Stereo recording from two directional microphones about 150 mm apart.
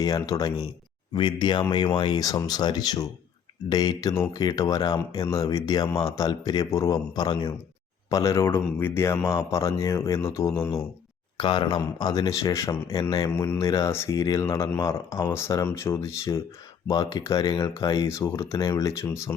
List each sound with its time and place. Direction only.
0.0 s speech: 25° left (ahead or behind)
11.3 s speech: 35° left (ahead or behind)